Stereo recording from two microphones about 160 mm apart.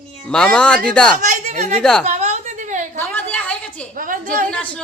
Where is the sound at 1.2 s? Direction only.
50° right (ahead or behind).